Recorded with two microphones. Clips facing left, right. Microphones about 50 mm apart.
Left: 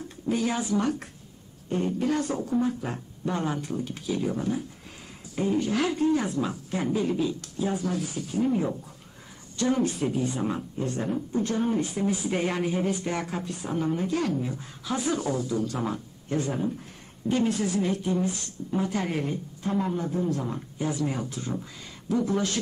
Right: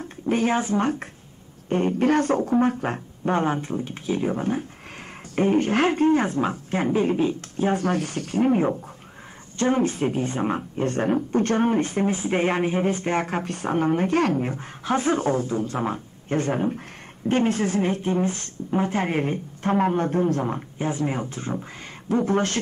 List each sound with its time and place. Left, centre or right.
0.0 s speech: right
9.6 s a woman's voice: right